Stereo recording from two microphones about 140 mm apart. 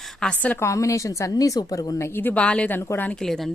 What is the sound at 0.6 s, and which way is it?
A woman's voice, 20° left (ahead or behind).